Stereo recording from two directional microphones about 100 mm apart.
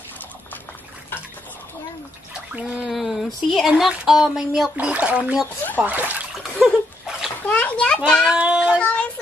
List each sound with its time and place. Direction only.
2.5 s speech: 5° right (ahead or behind)
6.6 s splash: 5° right (ahead or behind)
7.4 s a sound: 15° left (ahead or behind)
8.3 s meow: 10° right (ahead or behind)
8.7 s child singing: 10° left (ahead or behind)